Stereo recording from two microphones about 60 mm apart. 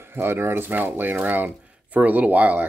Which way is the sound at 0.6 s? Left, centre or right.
Right.